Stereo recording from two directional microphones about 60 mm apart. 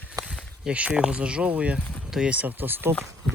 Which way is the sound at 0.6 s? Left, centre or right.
Centre.